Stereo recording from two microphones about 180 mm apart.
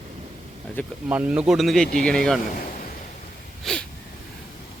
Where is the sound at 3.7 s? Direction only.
5° left (ahead or behind).